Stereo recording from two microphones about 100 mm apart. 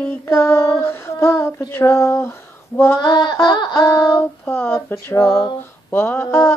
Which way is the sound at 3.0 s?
40° left (ahead or behind).